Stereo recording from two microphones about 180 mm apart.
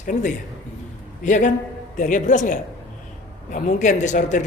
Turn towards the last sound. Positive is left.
turn(degrees=45)  # may be behind; listen again after turning